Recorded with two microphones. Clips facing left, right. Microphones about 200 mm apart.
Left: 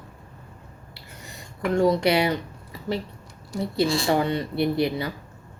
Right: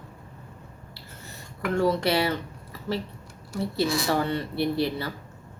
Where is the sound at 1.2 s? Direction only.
15° left (ahead or behind).